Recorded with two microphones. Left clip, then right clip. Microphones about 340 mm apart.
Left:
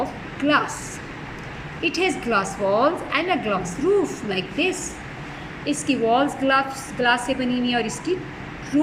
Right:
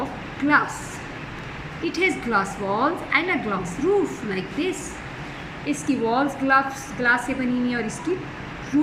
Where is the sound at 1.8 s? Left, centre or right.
Centre.